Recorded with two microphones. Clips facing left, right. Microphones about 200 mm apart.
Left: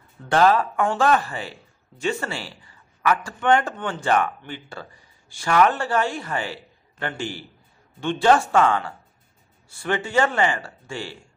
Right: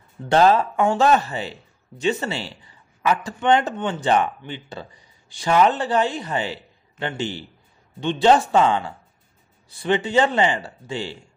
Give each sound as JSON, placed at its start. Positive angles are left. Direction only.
{"t": 0.3, "sound": "speech", "side_deg": -25}